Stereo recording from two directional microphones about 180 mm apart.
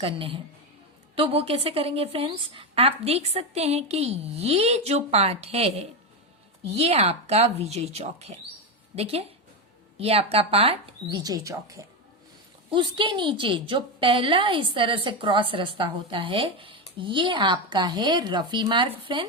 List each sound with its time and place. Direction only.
0.0 s a woman's voice: 30° right (ahead or behind)
11.2 s a woman's voice: 20° right (ahead or behind)